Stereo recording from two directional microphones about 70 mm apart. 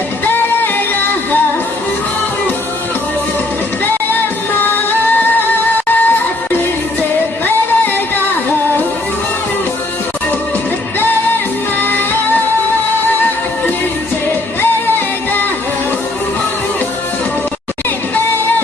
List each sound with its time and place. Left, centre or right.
4.5 s music: left
11.8 s music: left